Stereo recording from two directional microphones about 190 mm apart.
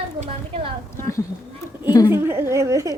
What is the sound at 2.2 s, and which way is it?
Speech, 15° right (ahead or behind).